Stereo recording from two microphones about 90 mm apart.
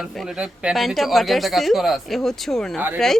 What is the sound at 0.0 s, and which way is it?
Speech, 5° right (ahead or behind).